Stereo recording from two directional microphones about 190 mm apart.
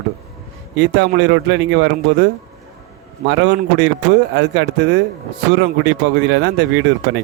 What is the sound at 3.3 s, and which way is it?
Speech, 65° right (ahead or behind).